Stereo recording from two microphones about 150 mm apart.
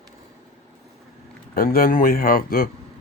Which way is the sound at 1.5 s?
75° left (ahead or behind).